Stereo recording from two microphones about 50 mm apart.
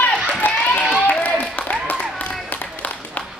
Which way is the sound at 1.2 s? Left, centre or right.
Left.